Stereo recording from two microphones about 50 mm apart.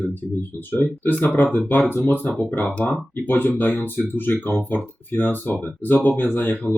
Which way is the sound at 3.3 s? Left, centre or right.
Left.